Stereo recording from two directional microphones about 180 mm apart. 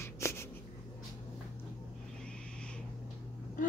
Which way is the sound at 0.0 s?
15° left (ahead or behind).